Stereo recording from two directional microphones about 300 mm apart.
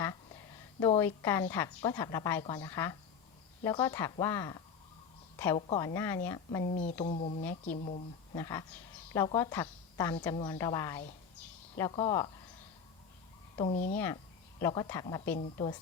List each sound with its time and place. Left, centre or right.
0.8 s speech: centre
6.7 s speech: left
8.4 s speech: centre
13.6 s speech: left
13.9 s speech: centre